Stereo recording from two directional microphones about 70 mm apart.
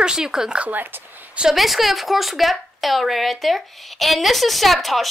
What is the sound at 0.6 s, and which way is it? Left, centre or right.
Speech, right.